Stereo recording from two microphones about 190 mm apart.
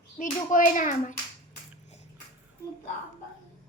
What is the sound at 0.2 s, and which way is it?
Speech, 45° left (ahead or behind).